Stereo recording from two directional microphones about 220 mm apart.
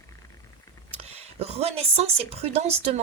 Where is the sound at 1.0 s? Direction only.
30° right (ahead or behind).